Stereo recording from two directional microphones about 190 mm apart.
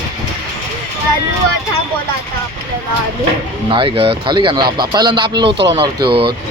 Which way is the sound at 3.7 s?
25° right (ahead or behind).